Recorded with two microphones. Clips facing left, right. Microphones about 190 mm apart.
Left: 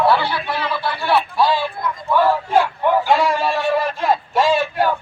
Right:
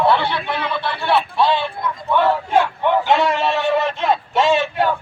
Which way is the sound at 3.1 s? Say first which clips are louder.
Even; 25° right (ahead or behind).